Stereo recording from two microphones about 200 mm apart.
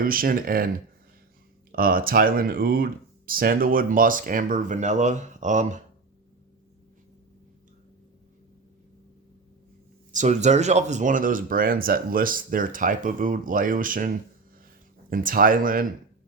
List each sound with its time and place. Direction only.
0.0 s speech: 45° right (ahead or behind)
1.7 s speech: 45° right (ahead or behind)
10.1 s speech: 35° right (ahead or behind)
15.1 s speech: 45° right (ahead or behind)